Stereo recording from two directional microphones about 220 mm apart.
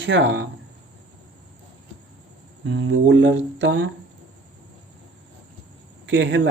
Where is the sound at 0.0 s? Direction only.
55° right (ahead or behind).